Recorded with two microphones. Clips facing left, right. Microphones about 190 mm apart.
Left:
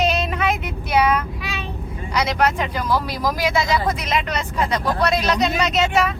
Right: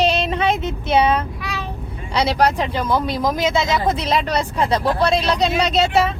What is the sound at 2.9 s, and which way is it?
Speech, 20° right (ahead or behind).